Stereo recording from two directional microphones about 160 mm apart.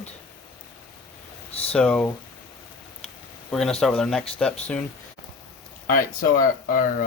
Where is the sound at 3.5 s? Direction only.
5° left (ahead or behind).